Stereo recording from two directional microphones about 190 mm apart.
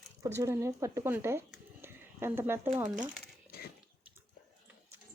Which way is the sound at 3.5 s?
55° left (ahead or behind).